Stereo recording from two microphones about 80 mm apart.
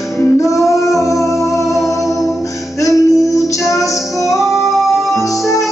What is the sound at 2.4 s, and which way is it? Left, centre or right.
Music, left.